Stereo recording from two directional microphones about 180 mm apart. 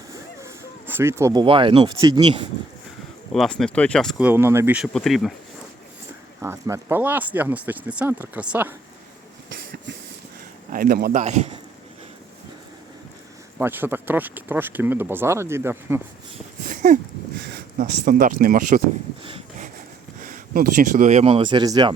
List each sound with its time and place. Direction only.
0.9 s speech: 10° right (ahead or behind); by 2.5 s 30° right (ahead or behind)
3.3 s speech: centre (ahead or behind)
6.4 s speech: 15° right (ahead or behind)
10.7 s speech: 55° right (ahead or behind)
11.2 s speech: 40° right (ahead or behind)
13.6 s speech: 10° right (ahead or behind)
16.6 s a sound: 45° right (ahead or behind)
17.5 s speech: 50° right (ahead or behind)
20.2 s speech: 50° right (ahead or behind); by 21.9 s 25° right (ahead or behind)